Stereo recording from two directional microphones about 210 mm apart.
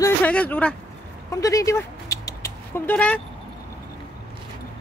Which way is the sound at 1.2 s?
15° left (ahead or behind).